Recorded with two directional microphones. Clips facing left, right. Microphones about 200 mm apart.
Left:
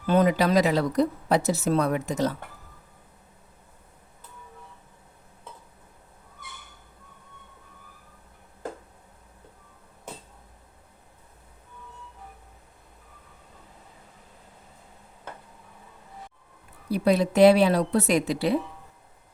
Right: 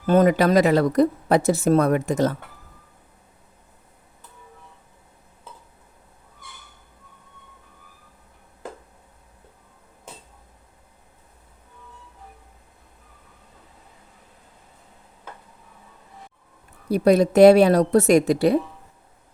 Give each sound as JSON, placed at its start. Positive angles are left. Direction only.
{"t": 0.0, "sound": "speech", "side_deg": -45}
{"t": 16.9, "sound": "speech", "side_deg": -45}